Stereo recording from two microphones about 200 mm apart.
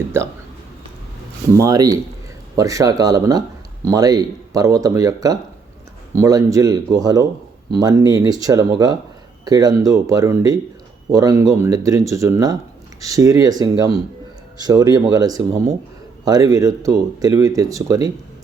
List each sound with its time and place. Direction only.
1.5 s speech: 20° right (ahead or behind)